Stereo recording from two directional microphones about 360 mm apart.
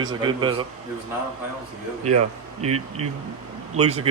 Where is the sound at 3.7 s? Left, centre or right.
Centre.